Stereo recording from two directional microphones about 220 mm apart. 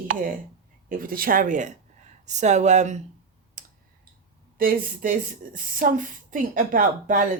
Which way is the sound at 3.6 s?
35° right (ahead or behind).